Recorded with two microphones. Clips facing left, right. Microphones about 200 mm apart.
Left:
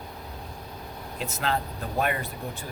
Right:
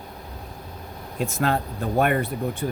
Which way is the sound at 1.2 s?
50° right (ahead or behind).